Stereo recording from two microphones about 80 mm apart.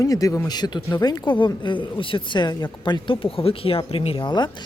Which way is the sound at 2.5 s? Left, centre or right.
Left.